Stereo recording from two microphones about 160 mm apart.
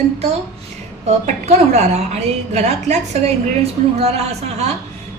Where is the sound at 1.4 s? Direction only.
45° right (ahead or behind).